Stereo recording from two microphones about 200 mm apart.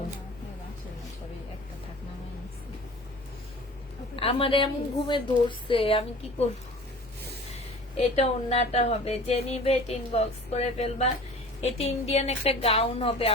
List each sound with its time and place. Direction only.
4.1 s a woman's voice: 30° left (ahead or behind)
8.1 s speech: 30° left (ahead or behind)